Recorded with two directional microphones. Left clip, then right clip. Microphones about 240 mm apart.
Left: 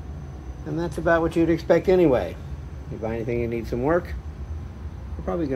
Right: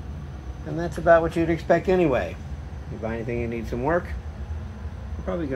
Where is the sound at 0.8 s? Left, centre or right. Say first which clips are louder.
Right 3 dB; centre.